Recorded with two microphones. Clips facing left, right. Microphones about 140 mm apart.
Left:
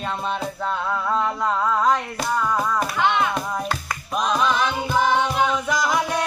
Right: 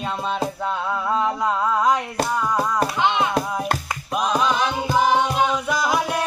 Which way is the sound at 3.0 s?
20° right (ahead or behind).